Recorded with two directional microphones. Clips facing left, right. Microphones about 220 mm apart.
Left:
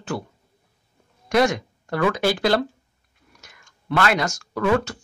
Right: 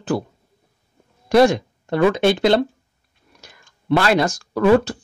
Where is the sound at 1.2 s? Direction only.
30° right (ahead or behind).